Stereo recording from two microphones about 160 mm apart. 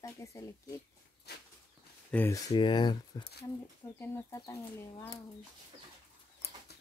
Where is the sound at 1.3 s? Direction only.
90° left.